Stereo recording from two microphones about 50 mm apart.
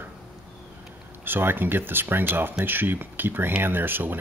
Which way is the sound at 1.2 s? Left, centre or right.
Right.